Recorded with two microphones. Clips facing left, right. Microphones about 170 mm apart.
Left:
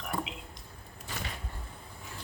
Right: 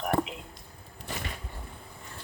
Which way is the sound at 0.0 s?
50° right (ahead or behind).